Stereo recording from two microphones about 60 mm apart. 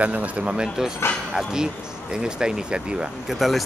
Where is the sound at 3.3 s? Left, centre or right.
Centre.